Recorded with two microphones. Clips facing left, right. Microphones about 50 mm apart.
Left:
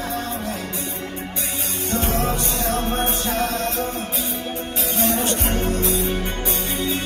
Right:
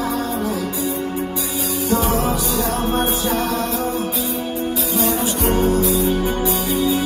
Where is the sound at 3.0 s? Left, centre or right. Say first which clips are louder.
Right 3 dB; left.